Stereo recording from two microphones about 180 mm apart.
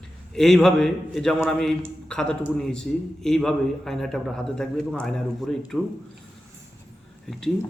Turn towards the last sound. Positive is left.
turn(degrees=0)  # may be behind; listen again after turning